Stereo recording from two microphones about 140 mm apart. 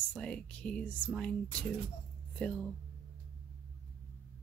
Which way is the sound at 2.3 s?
10° left (ahead or behind).